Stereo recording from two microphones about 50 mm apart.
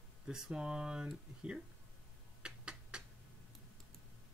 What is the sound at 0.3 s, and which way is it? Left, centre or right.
Speech, centre.